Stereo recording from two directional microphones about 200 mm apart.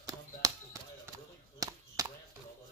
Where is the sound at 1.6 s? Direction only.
15° right (ahead or behind).